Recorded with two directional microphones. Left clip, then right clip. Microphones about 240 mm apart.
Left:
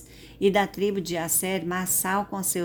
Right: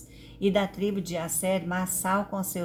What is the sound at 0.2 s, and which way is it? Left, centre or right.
A woman's voice, left.